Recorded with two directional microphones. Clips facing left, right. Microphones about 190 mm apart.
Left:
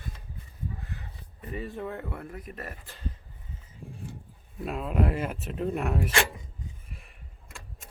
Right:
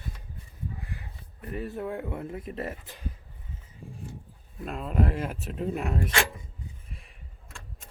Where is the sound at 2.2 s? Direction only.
25° right (ahead or behind).